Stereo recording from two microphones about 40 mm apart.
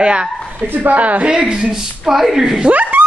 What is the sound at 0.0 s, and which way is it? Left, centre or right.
Speech, right.